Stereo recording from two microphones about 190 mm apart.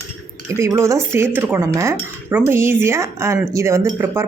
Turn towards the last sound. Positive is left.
turn(degrees=-15)  # may be behind; listen again after turning